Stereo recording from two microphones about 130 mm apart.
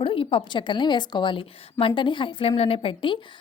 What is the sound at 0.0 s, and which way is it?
A woman's voice, 45° left (ahead or behind).